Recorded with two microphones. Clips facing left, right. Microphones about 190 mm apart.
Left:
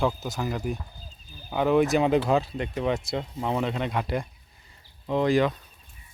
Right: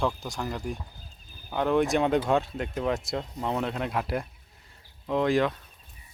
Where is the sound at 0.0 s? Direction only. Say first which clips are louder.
Left 3 dB; 5° left (ahead or behind).